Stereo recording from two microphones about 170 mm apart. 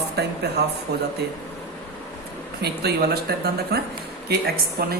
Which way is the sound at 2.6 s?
70° right (ahead or behind).